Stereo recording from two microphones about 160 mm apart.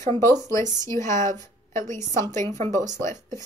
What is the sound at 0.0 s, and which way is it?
Speech, 15° left (ahead or behind).